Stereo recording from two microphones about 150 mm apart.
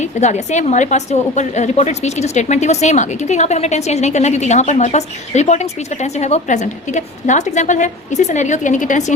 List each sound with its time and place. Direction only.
0.0 s a woman's voice: 50° left (ahead or behind)